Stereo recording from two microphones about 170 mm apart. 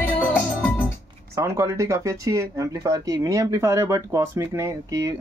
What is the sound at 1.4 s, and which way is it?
Speech, 15° right (ahead or behind).